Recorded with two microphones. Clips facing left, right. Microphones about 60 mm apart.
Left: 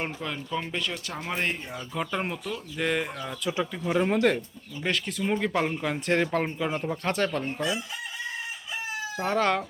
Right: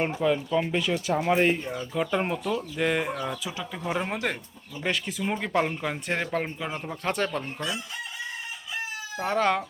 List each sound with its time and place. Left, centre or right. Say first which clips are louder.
0.0 s speech: right 8 dB; centre
7.4 s chicken: left 3 dB; centre
9.1 s speech: right 1 dB; centre